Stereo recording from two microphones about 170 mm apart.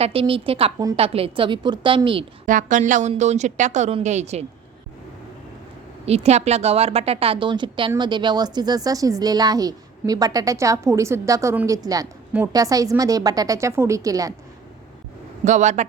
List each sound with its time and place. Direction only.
0.0 s a woman's voice: 35° right (ahead or behind)
2.5 s a woman's voice: 50° right (ahead or behind)
6.1 s a woman's voice: 40° right (ahead or behind); by 14.3 s 20° right (ahead or behind)
15.4 s a woman's voice: 45° right (ahead or behind)